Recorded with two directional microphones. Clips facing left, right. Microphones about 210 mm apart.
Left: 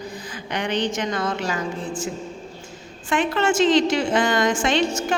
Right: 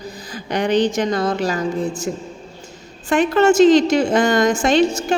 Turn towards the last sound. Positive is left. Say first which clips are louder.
# right 5 dB
turn(degrees=-35)  # may be behind; listen again after turning